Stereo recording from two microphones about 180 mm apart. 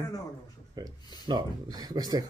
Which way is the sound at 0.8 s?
20° right (ahead or behind).